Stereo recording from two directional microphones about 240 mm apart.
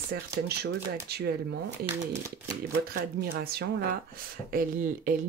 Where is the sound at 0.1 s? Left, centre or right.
Right.